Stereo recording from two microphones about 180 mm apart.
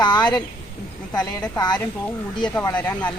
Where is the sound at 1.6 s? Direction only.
25° left (ahead or behind).